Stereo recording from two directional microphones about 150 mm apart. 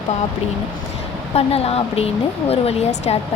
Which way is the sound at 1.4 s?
40° left (ahead or behind).